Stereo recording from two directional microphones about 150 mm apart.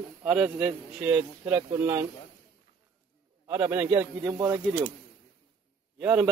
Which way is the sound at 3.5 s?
15° right (ahead or behind).